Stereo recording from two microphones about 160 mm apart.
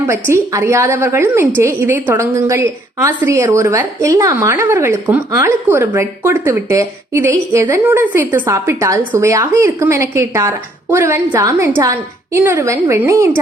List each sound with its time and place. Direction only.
0.1 s a woman's voice: 15° right (ahead or behind)